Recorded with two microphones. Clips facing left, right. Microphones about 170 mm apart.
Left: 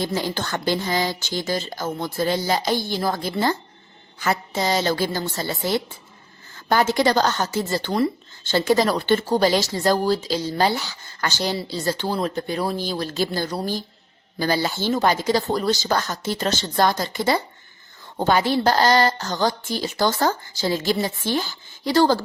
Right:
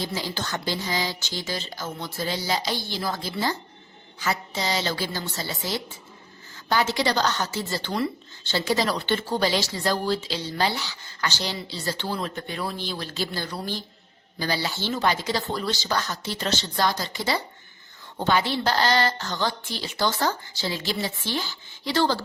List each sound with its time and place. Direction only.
0.0 s a woman's voice: 50° left (ahead or behind)